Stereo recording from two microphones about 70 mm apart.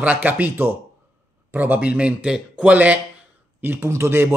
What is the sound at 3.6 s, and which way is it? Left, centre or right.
Speech, right.